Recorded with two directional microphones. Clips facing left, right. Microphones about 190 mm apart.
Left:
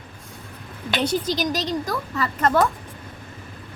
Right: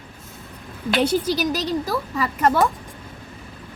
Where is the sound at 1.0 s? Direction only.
10° right (ahead or behind).